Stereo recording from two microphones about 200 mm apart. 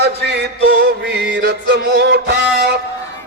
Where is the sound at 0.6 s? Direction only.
55° right (ahead or behind).